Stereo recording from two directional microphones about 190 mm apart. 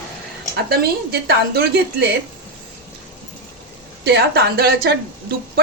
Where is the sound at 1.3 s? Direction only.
60° right (ahead or behind).